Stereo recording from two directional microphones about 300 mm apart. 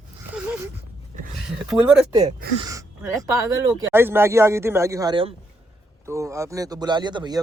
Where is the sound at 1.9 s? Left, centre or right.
Centre.